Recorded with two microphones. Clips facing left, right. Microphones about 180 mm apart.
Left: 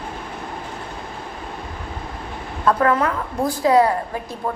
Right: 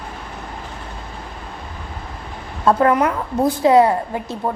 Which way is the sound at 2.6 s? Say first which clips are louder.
Right 3 dB; 20° right (ahead or behind).